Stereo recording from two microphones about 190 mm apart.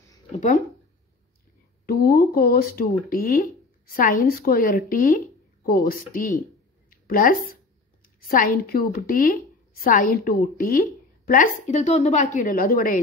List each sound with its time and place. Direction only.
0.3 s speech: 40° left (ahead or behind)
1.9 s a woman's voice: 50° left (ahead or behind)